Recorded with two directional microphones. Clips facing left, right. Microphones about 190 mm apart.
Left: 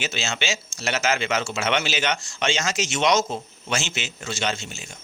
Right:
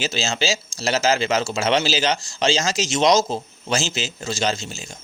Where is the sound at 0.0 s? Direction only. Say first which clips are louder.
Right 5 dB; 35° right (ahead or behind).